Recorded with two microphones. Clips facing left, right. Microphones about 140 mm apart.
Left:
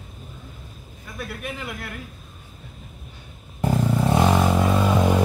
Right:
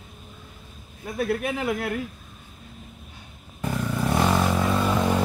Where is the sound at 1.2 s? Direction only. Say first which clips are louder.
Right 8 dB; 60° right (ahead or behind).